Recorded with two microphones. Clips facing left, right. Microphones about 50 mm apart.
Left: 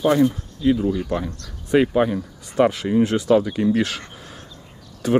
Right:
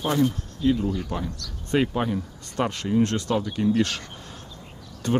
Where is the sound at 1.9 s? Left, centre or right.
Left.